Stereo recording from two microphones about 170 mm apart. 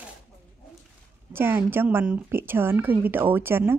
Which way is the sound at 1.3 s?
15° right (ahead or behind).